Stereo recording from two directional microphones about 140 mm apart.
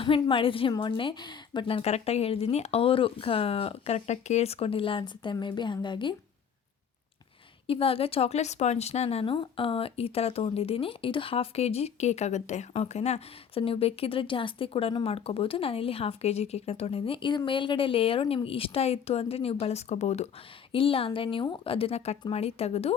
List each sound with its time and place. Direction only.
0.0 s a woman's voice: 40° left (ahead or behind)
7.7 s speech: 40° left (ahead or behind)
20.7 s a woman's voice: 40° left (ahead or behind)